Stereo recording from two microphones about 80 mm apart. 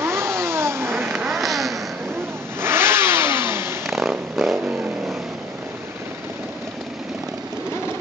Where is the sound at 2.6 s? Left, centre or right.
Right.